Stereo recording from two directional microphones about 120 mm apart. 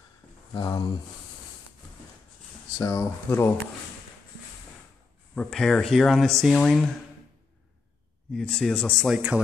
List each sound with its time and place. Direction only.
0.6 s speech: 35° left (ahead or behind)
2.8 s speech: 25° left (ahead or behind)
5.3 s speech: 5° left (ahead or behind)
8.3 s speech: 5° left (ahead or behind)
9.1 s speech: 10° right (ahead or behind)